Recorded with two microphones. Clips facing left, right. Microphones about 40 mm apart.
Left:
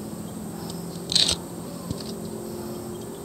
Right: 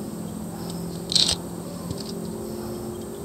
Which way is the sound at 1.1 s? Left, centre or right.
Left.